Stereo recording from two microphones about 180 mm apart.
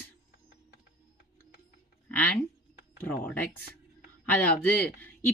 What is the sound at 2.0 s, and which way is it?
Speech, 10° left (ahead or behind).